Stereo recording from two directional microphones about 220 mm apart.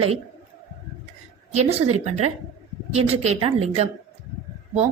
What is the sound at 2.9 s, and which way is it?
A woman's voice, 30° right (ahead or behind).